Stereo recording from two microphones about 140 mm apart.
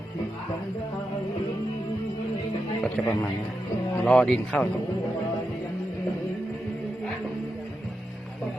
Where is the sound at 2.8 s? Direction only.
10° left (ahead or behind).